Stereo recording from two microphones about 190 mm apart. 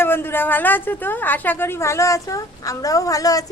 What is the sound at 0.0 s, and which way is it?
A woman's voice, 10° left (ahead or behind).